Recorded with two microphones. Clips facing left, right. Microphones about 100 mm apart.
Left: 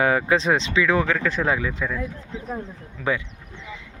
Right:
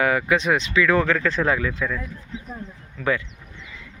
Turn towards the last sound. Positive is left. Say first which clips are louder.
# right 1 dB
turn(degrees=10)  # may be behind; listen again after turning